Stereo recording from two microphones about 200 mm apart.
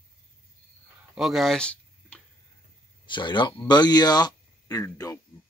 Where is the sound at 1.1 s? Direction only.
Centre (ahead or behind).